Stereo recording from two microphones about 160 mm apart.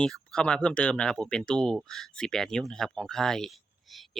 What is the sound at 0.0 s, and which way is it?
Speech, 5° left (ahead or behind).